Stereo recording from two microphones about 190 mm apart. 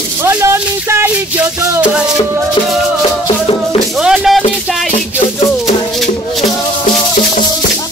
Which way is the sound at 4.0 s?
Centre (ahead or behind).